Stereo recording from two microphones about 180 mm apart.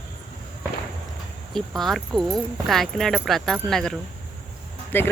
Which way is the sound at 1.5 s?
Centre (ahead or behind).